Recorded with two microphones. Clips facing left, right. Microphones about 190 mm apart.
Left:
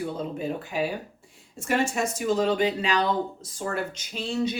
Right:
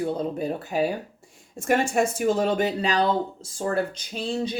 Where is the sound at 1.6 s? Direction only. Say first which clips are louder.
Right 4 dB; 55° right (ahead or behind); by 3.8 s 30° right (ahead or behind).